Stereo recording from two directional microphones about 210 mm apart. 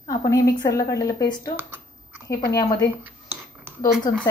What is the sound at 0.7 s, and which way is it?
A woman's voice, 15° left (ahead or behind).